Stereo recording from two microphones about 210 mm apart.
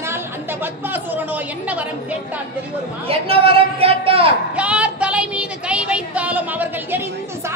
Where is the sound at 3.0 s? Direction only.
25° right (ahead or behind).